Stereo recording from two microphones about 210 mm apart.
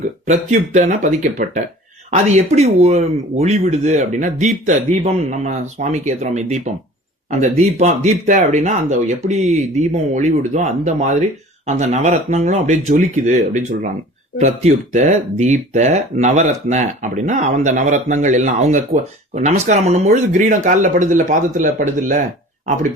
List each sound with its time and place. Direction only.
0.3 s speech: 35° right (ahead or behind)